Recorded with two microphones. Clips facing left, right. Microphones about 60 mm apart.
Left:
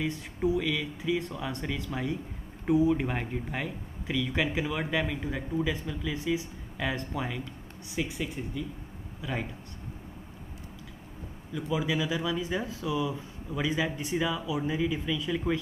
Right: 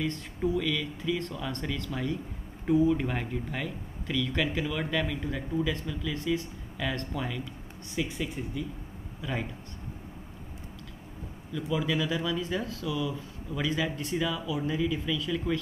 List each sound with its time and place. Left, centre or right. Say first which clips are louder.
0.0 s speech: left 1 dB; centre
11.5 s speech: even; centre